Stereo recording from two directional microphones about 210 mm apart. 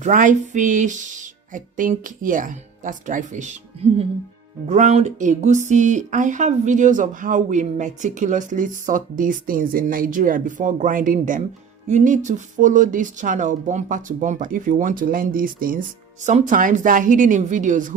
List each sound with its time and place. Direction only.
0.0 s speech: 35° right (ahead or behind)
4.6 s speech: 35° right (ahead or behind)